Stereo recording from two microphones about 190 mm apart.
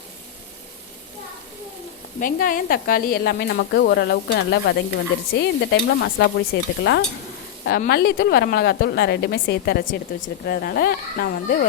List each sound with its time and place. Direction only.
2.2 s a woman's voice: 50° left (ahead or behind)